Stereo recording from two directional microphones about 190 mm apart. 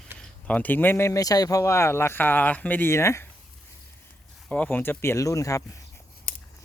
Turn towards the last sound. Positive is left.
turn(degrees=45)  # may be behind; listen again after turning